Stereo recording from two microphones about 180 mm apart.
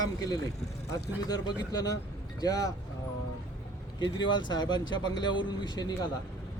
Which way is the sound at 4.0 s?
25° left (ahead or behind).